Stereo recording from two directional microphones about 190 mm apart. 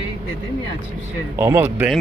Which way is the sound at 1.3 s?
15° right (ahead or behind).